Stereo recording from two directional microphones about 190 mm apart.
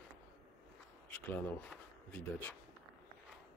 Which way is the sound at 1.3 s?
5° left (ahead or behind).